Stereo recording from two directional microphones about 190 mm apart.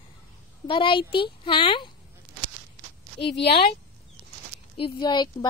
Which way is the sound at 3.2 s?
65° left (ahead or behind).